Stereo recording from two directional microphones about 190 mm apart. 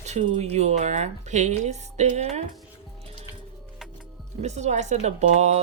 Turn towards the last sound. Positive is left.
turn(degrees=-35)  # may be behind; listen again after turning